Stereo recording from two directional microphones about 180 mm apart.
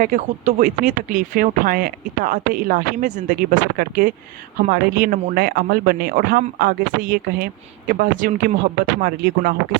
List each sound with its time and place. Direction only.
0.0 s speech: 45° right (ahead or behind)